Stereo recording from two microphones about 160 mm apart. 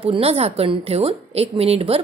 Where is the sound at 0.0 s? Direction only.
35° right (ahead or behind).